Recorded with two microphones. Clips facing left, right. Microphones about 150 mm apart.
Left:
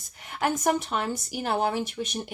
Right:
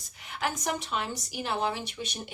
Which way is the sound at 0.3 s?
50° left (ahead or behind).